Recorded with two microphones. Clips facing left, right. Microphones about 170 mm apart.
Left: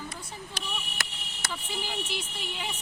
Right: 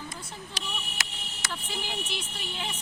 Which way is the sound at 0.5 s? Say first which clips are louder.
Even; 55° left (ahead or behind).